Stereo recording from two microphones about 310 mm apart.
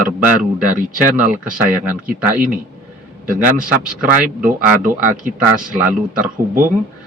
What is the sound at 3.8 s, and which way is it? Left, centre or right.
Speech, right.